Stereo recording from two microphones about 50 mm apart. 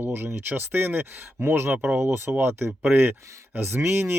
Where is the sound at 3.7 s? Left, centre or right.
Right.